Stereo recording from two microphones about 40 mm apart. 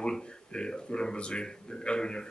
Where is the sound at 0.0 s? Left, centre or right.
Left.